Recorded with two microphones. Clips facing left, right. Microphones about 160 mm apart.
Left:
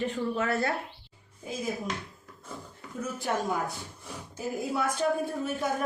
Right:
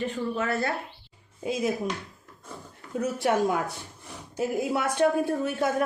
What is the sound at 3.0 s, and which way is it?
A woman's voice, 80° right.